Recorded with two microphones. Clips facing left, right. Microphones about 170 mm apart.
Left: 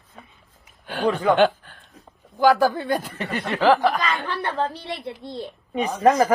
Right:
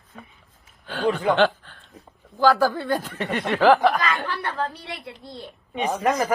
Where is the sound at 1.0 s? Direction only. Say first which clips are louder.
Left 1 dB; 45° left (ahead or behind).